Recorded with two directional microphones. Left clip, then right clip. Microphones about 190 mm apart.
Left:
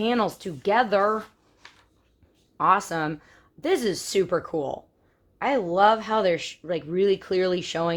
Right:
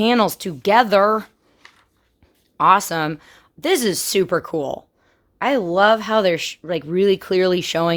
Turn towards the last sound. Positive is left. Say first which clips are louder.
# right 7 dB
turn(degrees=-60)  # may be behind; listen again after turning